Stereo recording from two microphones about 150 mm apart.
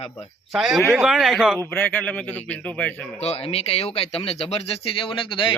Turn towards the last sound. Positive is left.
turn(degrees=35)  # may be behind; listen again after turning